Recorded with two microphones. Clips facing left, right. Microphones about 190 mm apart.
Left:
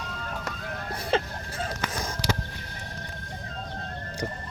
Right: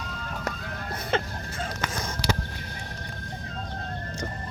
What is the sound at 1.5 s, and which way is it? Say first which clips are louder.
Chicken: left 1 dB; centre (ahead or behind).